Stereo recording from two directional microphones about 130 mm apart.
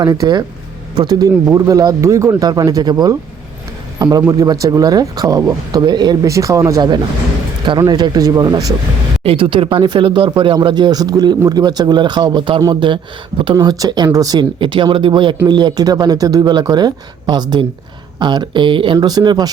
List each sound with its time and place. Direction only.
0.0 s a man's voice: 30° right (ahead or behind)
9.2 s speech: 45° right (ahead or behind)